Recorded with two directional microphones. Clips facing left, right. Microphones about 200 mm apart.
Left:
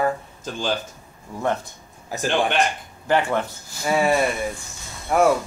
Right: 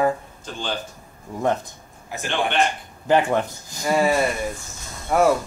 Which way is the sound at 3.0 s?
15° right (ahead or behind).